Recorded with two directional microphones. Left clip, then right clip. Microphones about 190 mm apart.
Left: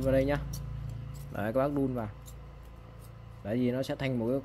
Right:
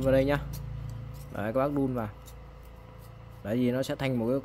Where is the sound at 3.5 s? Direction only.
15° right (ahead or behind).